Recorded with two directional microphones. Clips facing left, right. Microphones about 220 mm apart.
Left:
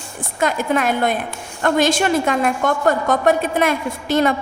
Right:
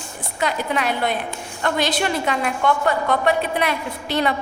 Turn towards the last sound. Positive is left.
turn(degrees=45)  # may be behind; listen again after turning